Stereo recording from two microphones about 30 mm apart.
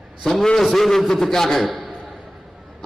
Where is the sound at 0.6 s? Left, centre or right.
Centre.